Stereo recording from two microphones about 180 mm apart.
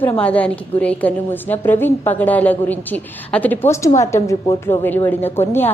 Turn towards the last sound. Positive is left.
turn(degrees=15)  # may be behind; listen again after turning